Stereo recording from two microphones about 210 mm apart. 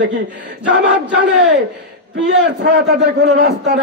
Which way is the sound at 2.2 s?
55° right (ahead or behind).